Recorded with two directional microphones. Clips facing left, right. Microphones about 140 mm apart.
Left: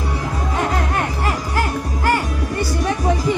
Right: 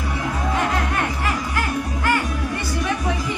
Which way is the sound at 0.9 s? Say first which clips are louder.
Left 2 dB; 35° left (ahead or behind).